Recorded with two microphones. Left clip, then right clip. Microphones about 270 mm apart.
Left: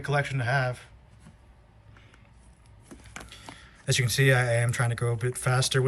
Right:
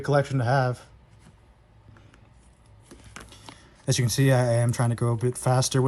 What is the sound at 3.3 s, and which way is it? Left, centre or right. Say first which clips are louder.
Speech: left 1 dB; centre.